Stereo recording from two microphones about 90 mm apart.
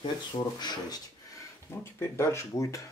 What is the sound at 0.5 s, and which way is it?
Speech, 50° left (ahead or behind).